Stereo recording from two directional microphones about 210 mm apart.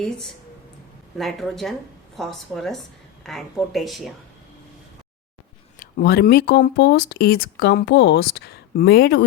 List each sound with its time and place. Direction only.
1.2 s speech: centre (ahead or behind)
5.8 s speech: 50° left (ahead or behind)